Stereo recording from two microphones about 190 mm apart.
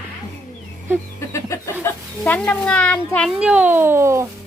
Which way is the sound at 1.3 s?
15° left (ahead or behind).